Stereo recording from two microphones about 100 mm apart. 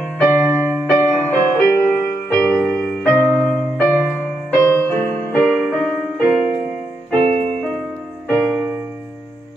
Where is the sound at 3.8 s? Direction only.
10° left (ahead or behind).